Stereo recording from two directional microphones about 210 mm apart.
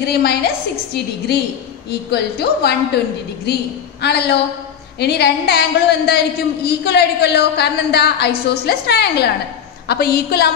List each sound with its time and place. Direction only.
0.0 s a woman's voice: 50° left (ahead or behind)
4.0 s a woman's voice: 50° left (ahead or behind)